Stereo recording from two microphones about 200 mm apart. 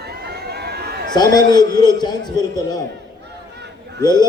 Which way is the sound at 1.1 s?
20° left (ahead or behind).